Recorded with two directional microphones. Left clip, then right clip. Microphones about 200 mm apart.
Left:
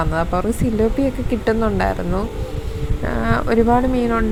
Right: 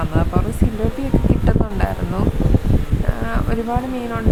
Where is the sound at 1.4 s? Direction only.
20° left (ahead or behind).